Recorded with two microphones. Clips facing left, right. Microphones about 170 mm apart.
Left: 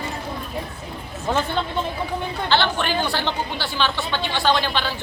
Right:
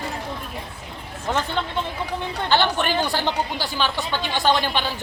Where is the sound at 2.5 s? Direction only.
15° right (ahead or behind).